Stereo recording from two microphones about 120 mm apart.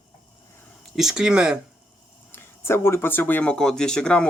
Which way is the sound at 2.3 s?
20° left (ahead or behind).